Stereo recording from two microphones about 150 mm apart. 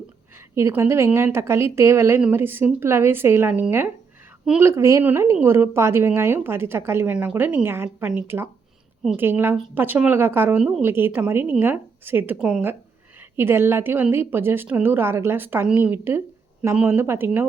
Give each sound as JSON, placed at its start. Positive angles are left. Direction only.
{"t": 0.5, "sound": "a woman's voice", "side_deg": -20}